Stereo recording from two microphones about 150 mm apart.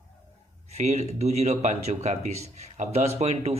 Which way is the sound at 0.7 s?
50° right (ahead or behind).